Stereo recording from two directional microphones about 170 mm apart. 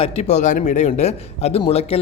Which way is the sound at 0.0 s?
40° left (ahead or behind).